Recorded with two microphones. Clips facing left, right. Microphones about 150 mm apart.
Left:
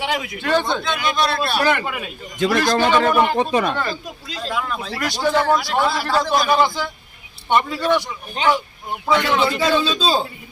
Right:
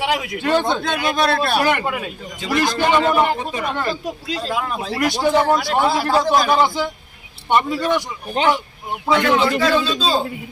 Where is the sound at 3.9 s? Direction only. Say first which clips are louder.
Right 5 dB; 35° right (ahead or behind).